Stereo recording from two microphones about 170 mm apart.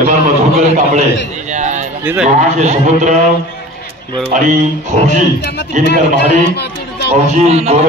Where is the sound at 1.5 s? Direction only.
45° right (ahead or behind).